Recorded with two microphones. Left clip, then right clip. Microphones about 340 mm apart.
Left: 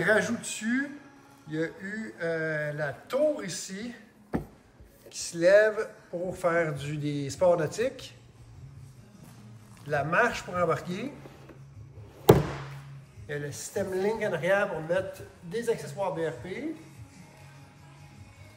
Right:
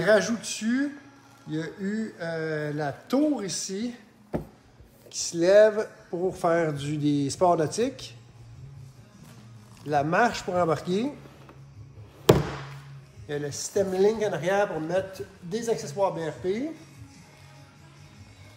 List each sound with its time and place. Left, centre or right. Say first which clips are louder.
0.0 s speech: right 3 dB; centre
4.3 s a sound: right 1 dB; centre
5.1 s speech: right 2 dB; centre
9.8 s speech: right 3 dB; centre
13.3 s speech: right 5 dB; centre